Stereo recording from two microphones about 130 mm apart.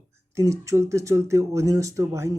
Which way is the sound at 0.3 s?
25° right (ahead or behind).